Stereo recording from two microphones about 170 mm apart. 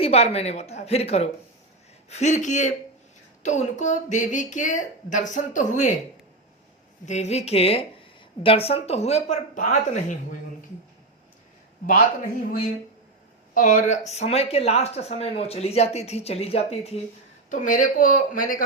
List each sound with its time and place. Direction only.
0.0 s a woman's voice: 35° left (ahead or behind)
7.0 s speech: 40° left (ahead or behind)
13.5 s speech: 50° left (ahead or behind)
17.5 s a woman's voice: 50° left (ahead or behind)